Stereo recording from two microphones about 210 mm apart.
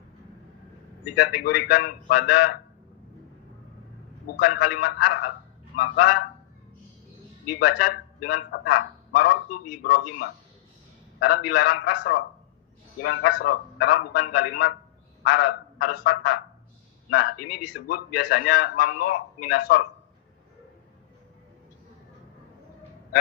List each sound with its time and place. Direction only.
1.0 s a man's voice: 45° left (ahead or behind)
4.3 s a man's voice: 45° left (ahead or behind)
7.5 s a man's voice: 45° left (ahead or behind)